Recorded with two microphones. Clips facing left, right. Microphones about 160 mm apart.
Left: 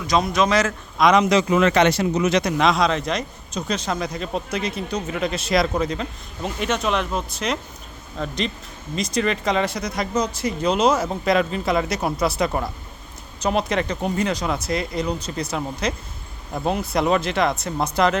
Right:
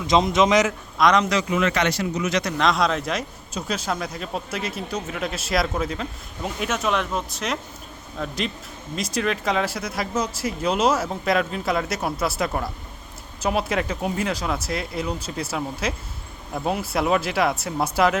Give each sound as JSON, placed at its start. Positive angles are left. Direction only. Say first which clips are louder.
{"t": 0.1, "sound": "speech", "louder": "right 1 dB", "side_deg": -20}
{"t": 0.9, "sound": "speech", "louder": "left 2 dB", "side_deg": 5}
{"t": 1.2, "sound": "speech", "louder": "left 5 dB", "side_deg": 20}
{"t": 1.5, "sound": "speech", "louder": "left 5 dB", "side_deg": 35}
{"t": 2.6, "sound": "speech", "louder": "left 2 dB", "side_deg": 0}